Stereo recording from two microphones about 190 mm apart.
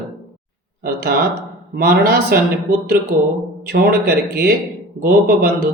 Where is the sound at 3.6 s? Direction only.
50° right (ahead or behind).